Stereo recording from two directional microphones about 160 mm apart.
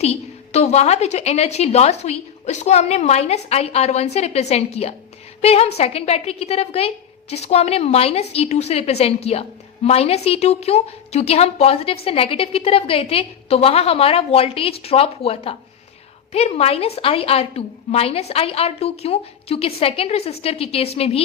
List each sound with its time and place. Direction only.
0.0 s a woman's voice: 40° left (ahead or behind)